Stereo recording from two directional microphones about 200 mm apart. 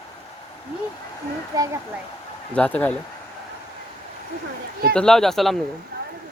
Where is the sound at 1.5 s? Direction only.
15° right (ahead or behind).